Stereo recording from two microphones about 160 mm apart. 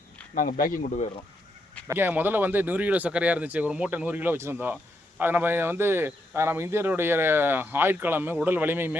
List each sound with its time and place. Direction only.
0.3 s speech: 55° left (ahead or behind)
1.9 s speech: 10° right (ahead or behind)